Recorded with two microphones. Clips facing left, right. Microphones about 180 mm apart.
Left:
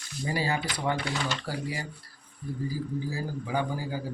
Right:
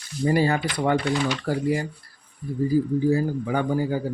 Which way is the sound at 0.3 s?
55° right (ahead or behind).